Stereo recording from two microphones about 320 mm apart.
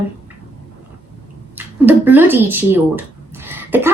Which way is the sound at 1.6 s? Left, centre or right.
Centre.